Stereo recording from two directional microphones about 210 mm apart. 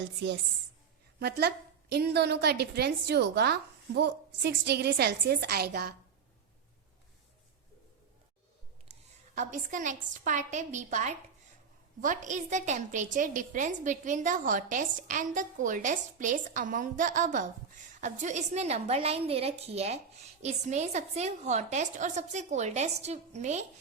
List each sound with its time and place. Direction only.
0.2 s a woman's voice: 55° right (ahead or behind)
8.9 s a sound: 30° right (ahead or behind)
9.3 s a woman's voice: 35° right (ahead or behind)